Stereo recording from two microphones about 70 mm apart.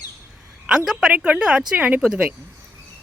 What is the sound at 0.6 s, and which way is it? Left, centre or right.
Speech, centre.